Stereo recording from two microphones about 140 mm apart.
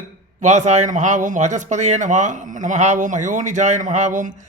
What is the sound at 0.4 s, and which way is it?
Speech, 55° right (ahead or behind).